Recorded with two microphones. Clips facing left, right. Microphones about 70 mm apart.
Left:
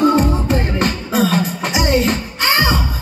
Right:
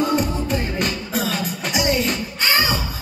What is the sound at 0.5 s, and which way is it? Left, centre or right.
Music, left.